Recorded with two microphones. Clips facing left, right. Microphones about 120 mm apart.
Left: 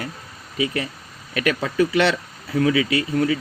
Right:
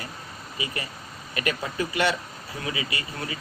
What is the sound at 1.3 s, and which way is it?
Speech, 90° left.